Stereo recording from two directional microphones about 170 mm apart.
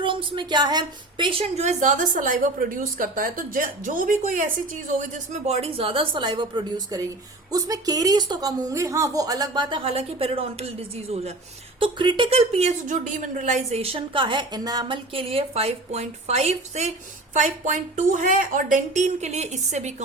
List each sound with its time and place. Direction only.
0.0 s a woman's voice: 30° right (ahead or behind)